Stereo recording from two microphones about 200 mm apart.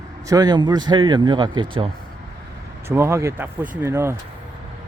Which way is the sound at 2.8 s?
15° right (ahead or behind).